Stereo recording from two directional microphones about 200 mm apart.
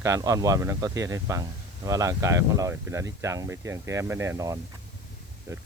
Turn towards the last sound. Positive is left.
turn(degrees=-15)  # may be behind; listen again after turning